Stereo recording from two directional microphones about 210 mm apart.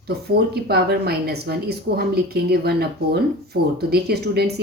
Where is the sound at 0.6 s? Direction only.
50° right (ahead or behind).